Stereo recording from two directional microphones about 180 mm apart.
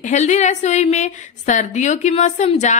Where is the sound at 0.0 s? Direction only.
40° left (ahead or behind).